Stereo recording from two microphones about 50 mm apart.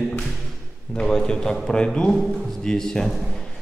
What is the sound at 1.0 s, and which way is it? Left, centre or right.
A man's voice, centre.